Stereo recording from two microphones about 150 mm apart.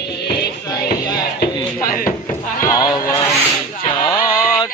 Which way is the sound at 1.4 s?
75° left (ahead or behind).